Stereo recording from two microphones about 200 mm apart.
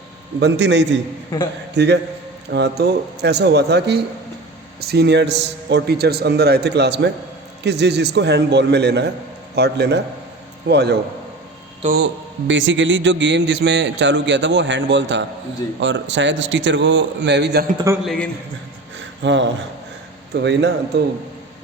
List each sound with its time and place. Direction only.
0.3 s a man's voice: 60° right (ahead or behind)
12.5 s a man's voice: 65° right (ahead or behind)
18.0 s a man's voice: centre (ahead or behind)
19.2 s a man's voice: 65° right (ahead or behind)